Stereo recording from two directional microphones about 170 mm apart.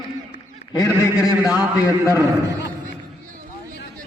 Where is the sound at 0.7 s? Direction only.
20° left (ahead or behind).